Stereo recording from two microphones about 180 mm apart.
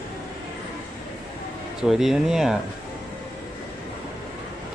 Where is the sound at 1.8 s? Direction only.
Centre (ahead or behind).